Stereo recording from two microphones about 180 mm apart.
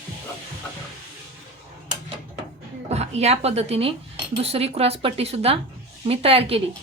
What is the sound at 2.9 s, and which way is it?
Speech, 35° right (ahead or behind).